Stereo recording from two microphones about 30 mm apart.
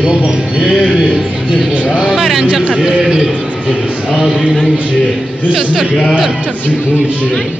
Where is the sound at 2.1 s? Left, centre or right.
Centre.